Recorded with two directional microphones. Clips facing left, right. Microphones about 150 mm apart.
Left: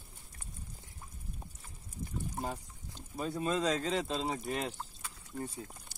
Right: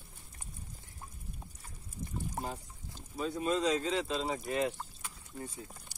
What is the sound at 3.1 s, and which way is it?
Speech, 40° left (ahead or behind).